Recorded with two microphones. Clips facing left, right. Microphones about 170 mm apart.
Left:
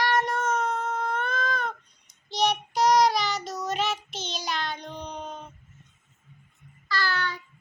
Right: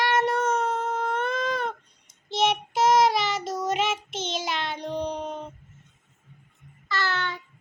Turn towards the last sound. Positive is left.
turn(degrees=-20)  # may be behind; listen again after turning